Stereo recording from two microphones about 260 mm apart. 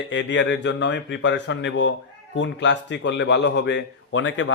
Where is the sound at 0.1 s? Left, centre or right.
Left.